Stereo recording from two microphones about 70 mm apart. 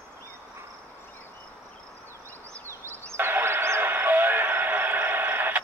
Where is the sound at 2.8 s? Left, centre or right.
Right.